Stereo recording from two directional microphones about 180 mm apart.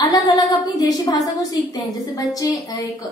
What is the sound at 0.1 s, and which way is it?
A woman's voice, 20° left (ahead or behind).